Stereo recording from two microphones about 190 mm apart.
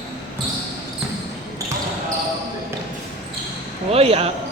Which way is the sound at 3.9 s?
30° right (ahead or behind).